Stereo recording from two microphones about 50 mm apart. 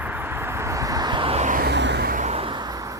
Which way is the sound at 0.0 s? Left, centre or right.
Right.